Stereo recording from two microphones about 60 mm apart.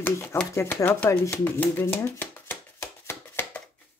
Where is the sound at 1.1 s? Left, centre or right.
Left.